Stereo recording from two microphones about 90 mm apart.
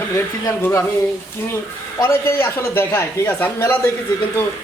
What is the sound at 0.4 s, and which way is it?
Speech, 30° left (ahead or behind).